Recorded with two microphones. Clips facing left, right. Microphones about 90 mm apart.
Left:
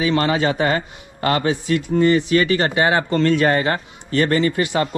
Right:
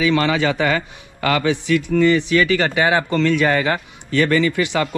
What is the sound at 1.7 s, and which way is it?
Speech, 20° left (ahead or behind).